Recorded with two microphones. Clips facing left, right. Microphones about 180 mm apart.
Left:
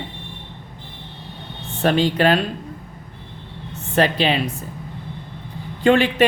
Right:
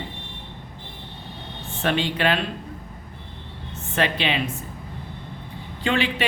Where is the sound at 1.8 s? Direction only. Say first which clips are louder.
Left 6 dB; 40° left (ahead or behind).